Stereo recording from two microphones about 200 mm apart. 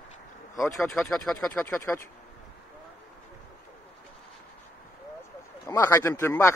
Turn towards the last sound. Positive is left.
turn(degrees=15)  # may be behind; listen again after turning